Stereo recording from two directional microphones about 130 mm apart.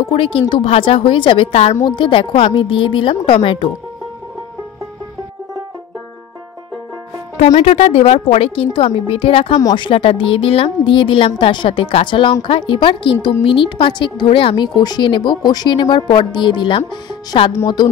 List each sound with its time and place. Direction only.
0.0 s a woman's voice: 45° left (ahead or behind)
1.8 s speech: 35° left (ahead or behind)
7.5 s a woman's voice: 50° left (ahead or behind)
9.6 s speech: 25° left (ahead or behind)
9.8 s speech: 45° left (ahead or behind)